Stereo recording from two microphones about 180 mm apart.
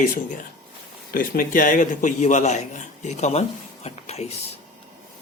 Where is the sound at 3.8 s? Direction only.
35° left (ahead or behind).